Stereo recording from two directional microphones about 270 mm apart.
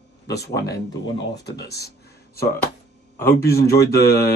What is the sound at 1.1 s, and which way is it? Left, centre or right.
Speech, left.